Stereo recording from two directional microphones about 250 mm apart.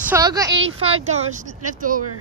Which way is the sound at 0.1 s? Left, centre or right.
Centre.